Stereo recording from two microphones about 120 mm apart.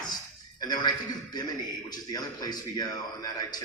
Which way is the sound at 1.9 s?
35° left (ahead or behind).